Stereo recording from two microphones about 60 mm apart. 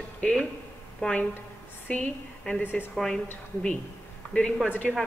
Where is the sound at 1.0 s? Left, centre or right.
Centre.